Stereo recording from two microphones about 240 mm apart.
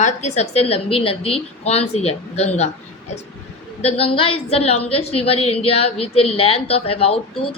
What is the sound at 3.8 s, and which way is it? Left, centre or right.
A woman's voice, left.